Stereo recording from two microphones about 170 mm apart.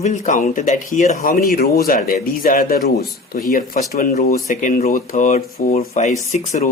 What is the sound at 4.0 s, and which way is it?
Speech, 50° left (ahead or behind).